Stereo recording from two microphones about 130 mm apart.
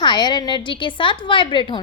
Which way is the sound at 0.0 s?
35° left (ahead or behind).